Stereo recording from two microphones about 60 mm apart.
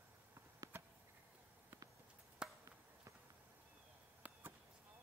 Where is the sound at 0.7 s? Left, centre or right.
Right.